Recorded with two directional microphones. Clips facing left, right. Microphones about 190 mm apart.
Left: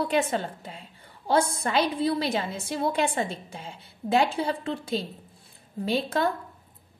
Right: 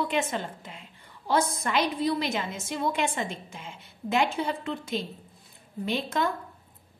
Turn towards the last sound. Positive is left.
turn(degrees=35)  # may be behind; listen again after turning